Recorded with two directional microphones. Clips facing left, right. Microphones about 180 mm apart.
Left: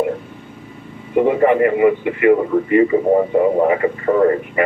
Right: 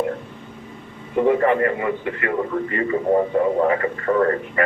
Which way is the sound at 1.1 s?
15° left (ahead or behind).